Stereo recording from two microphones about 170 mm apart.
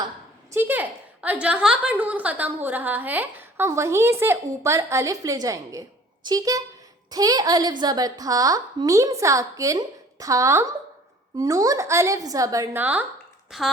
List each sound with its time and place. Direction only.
0.5 s a woman's voice: 10° right (ahead or behind)